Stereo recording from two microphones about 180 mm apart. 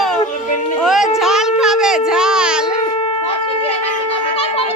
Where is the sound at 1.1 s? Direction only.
5° right (ahead or behind).